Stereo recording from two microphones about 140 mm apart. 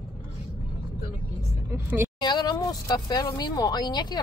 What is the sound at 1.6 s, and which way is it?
Speech, 15° right (ahead or behind).